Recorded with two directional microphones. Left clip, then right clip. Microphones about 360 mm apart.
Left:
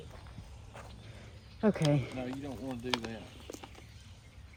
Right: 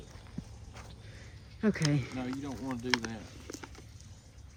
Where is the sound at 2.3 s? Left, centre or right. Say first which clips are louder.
Right 2 dB; centre.